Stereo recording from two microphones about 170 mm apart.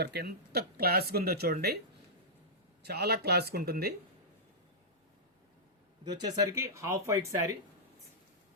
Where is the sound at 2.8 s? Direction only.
70° right (ahead or behind).